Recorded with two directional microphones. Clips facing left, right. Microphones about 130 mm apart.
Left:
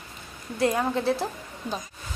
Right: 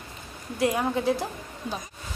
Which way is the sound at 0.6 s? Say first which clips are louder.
Even; 15° right (ahead or behind).